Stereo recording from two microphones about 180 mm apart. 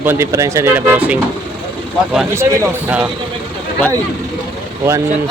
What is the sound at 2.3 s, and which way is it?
Speech, 15° right (ahead or behind).